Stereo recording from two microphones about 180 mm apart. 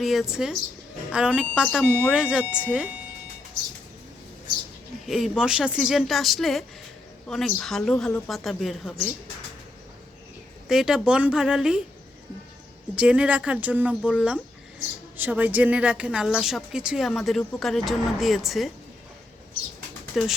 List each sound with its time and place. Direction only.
0.0 s a woman's voice: centre (ahead or behind)
5.0 s a woman's voice: centre (ahead or behind)
10.7 s a woman's voice: 5° right (ahead or behind)
13.0 s a woman's voice: 5° right (ahead or behind)
20.1 s a woman's voice: centre (ahead or behind)